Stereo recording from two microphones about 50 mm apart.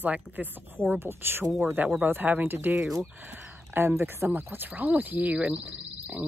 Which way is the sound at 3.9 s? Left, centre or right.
Right.